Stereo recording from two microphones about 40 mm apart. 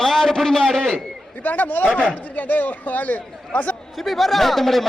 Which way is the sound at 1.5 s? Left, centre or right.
Left.